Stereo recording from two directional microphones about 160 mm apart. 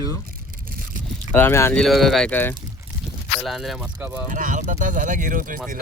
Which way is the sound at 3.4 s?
Centre (ahead or behind).